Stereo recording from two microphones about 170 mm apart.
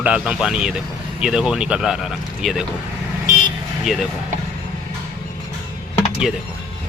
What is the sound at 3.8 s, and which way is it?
Speech, centre (ahead or behind).